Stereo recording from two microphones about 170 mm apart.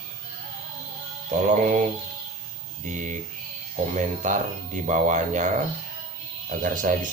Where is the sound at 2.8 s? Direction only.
45° right (ahead or behind).